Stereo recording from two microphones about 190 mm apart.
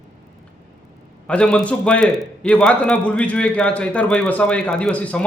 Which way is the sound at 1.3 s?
5° left (ahead or behind).